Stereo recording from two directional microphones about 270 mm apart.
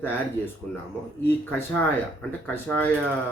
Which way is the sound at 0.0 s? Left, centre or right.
Centre.